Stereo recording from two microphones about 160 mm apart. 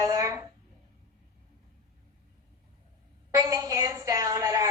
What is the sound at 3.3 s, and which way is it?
A woman's voice, 20° right (ahead or behind).